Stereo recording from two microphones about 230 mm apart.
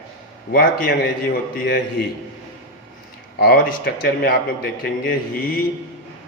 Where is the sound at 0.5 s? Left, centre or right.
Left.